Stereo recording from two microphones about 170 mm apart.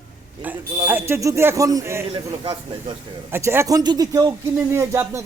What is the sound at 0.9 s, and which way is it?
Speech, 15° right (ahead or behind).